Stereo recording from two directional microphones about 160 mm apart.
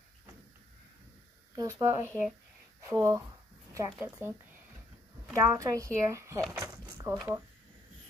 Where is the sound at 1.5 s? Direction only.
20° right (ahead or behind).